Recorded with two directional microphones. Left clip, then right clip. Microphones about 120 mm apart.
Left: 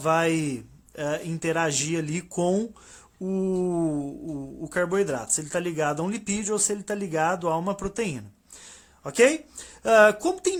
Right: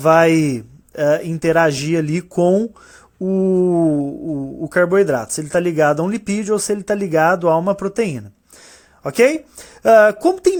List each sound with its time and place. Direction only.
0.0 s speech: 45° right (ahead or behind)